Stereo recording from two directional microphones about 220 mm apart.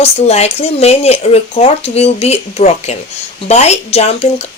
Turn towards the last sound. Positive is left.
turn(degrees=30)  # may be behind; listen again after turning